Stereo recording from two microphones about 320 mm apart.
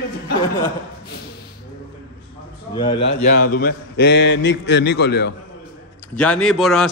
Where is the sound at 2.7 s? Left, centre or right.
Centre.